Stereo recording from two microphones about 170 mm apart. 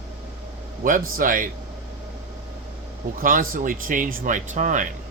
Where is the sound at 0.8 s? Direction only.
55° right (ahead or behind).